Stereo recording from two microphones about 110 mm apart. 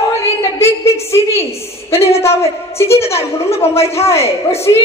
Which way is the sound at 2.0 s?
70° left (ahead or behind).